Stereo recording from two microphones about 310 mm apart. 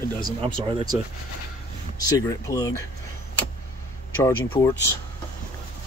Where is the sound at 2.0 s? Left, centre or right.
Centre.